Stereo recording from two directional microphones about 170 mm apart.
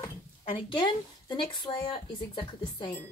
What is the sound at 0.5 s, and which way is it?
A woman's voice, 25° left (ahead or behind).